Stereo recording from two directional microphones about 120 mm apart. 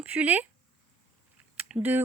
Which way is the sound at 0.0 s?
15° right (ahead or behind).